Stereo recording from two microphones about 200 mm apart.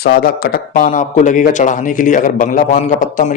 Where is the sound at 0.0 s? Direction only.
50° left (ahead or behind).